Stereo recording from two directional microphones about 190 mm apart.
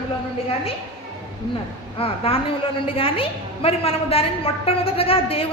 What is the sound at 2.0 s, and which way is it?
A woman's voice, 30° left (ahead or behind).